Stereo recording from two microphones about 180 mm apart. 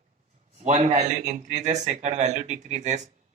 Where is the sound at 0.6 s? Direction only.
40° right (ahead or behind).